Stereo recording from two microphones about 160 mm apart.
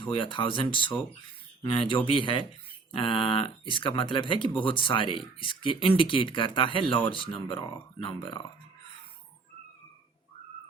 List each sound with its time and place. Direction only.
0.0 s speech: 30° left (ahead or behind)